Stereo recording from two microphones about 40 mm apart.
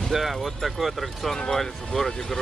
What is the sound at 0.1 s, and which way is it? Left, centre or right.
Speech, centre.